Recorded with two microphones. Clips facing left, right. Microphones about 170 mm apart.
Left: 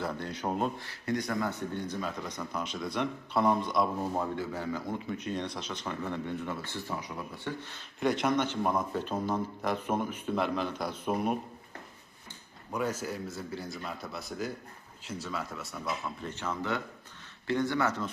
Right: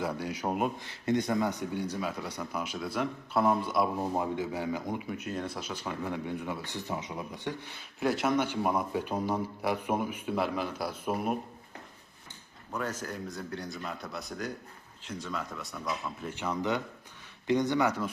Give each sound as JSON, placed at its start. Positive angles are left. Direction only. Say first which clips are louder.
{"t": 0.0, "sound": "speech", "louder": "right 2 dB", "side_deg": -10}
{"t": 4.0, "sound": "speech", "louder": "right 1 dB", "side_deg": -15}
{"t": 12.7, "sound": "a man's voice", "louder": "left 2 dB", "side_deg": 10}
{"t": 16.2, "sound": "speech", "louder": "right 5 dB", "side_deg": -15}